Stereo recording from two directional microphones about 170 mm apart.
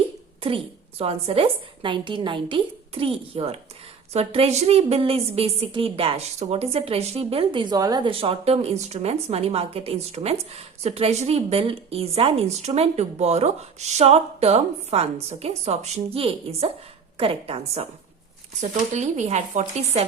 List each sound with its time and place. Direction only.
0.4 s speech: 35° right (ahead or behind)